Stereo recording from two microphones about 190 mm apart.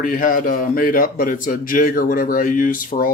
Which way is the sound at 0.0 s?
45° left (ahead or behind).